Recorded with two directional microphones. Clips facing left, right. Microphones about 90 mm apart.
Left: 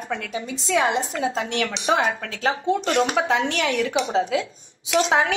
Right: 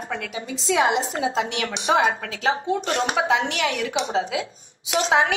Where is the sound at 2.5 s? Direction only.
30° right (ahead or behind).